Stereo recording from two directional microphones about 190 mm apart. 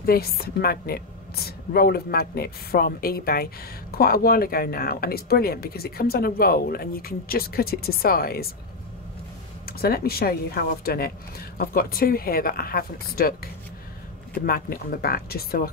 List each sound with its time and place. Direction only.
0.0 s a woman's voice: 50° left (ahead or behind)
9.7 s a woman's voice: 55° left (ahead or behind)